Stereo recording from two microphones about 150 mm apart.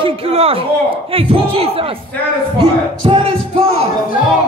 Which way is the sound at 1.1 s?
40° right (ahead or behind).